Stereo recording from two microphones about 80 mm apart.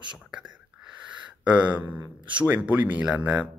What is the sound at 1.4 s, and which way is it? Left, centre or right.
Speech, centre.